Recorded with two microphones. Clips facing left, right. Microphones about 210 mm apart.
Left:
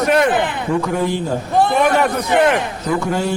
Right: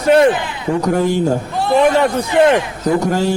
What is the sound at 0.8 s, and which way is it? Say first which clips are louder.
Speech: right 5 dB; 45° right (ahead or behind).